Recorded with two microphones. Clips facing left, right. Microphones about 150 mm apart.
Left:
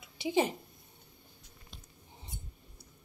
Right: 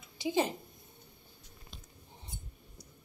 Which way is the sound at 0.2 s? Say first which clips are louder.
Left 1 dB; 20° left (ahead or behind).